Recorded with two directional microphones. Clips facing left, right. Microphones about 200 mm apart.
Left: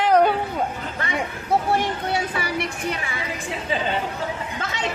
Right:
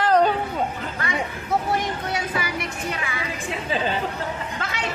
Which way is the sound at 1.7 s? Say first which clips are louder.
Left 3 dB; 30° left (ahead or behind).